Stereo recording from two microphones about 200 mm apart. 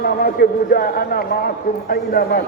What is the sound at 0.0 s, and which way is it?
A man's voice, 50° left (ahead or behind).